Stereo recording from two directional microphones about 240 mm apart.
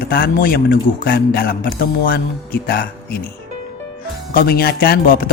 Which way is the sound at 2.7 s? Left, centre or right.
Left.